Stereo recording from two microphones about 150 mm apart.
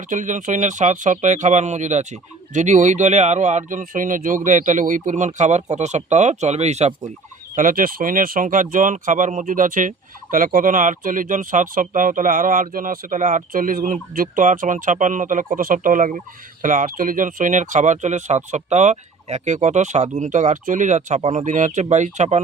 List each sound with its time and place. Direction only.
0.1 s speech: 60° right (ahead or behind)
7.5 s speech: 65° right (ahead or behind)